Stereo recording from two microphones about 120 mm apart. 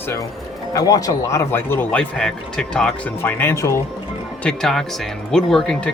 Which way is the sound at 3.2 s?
20° left (ahead or behind).